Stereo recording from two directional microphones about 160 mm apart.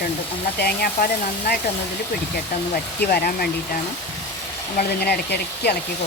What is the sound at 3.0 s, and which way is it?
Speech, 70° left (ahead or behind).